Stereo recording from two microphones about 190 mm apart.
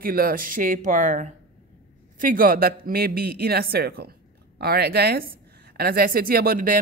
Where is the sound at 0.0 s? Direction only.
50° right (ahead or behind).